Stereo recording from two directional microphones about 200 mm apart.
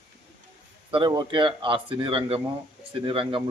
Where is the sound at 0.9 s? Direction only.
25° right (ahead or behind).